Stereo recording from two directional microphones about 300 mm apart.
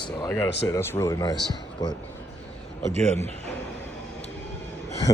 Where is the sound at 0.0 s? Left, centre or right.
Centre.